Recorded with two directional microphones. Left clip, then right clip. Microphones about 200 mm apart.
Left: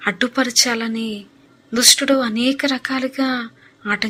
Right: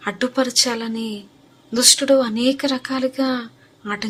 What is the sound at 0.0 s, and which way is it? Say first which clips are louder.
A woman's voice: left 2 dB; 15° left (ahead or behind).